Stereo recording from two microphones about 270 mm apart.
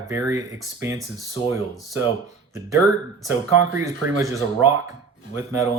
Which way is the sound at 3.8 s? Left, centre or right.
Centre.